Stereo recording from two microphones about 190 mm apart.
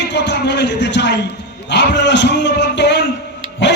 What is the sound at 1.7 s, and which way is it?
A man's voice, 65° left (ahead or behind).